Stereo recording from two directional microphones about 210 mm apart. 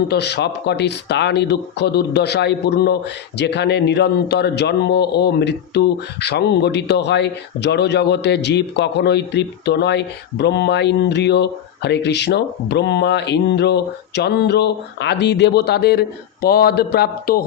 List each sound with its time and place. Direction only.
0.1 s speech: 50° left (ahead or behind)